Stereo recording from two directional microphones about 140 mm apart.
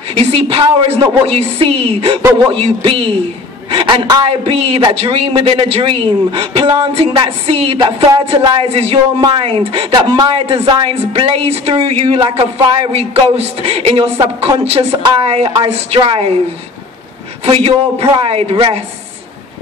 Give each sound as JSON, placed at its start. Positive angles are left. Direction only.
{"t": 0.2, "sound": "a man's voice", "side_deg": -40}
{"t": 9.9, "sound": "a man's voice", "side_deg": -30}
{"t": 10.4, "sound": "a man's voice", "side_deg": -40}
{"t": 17.5, "sound": "speech", "side_deg": -40}